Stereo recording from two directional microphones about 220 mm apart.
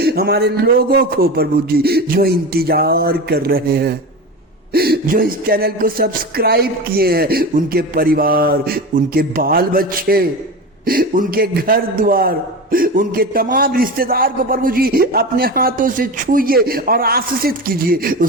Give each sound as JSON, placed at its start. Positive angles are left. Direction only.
{"t": 0.0, "sound": "a man's voice", "side_deg": -45}